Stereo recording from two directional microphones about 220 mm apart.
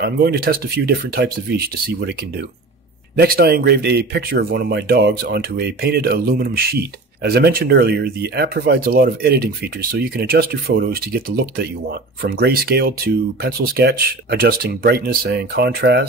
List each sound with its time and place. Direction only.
0.0 s speech: 45° right (ahead or behind)